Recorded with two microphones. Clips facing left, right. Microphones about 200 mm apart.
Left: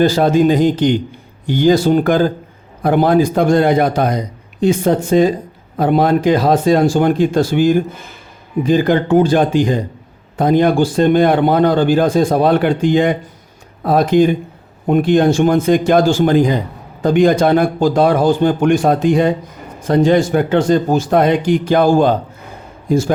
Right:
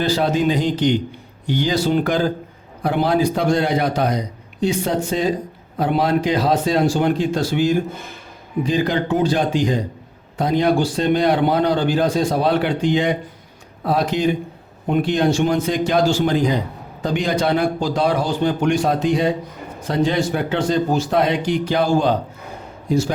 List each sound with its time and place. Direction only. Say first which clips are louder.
0.0 s a man's voice: left 7 dB; 50° left (ahead or behind)